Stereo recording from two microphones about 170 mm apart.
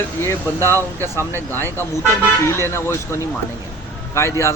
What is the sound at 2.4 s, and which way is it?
Speech, 15° left (ahead or behind).